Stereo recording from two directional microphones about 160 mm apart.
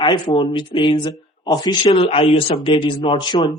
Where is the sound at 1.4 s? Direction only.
25° left (ahead or behind).